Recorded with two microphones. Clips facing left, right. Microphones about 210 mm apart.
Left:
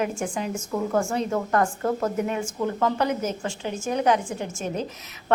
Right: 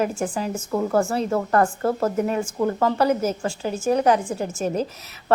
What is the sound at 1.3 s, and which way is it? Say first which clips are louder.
A woman's voice: right 3 dB; 35° right (ahead or behind).